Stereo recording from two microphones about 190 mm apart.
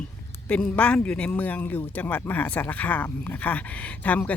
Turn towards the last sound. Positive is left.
turn(degrees=5)  # may be behind; listen again after turning